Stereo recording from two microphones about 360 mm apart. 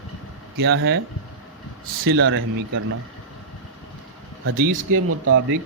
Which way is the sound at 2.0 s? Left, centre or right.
Right.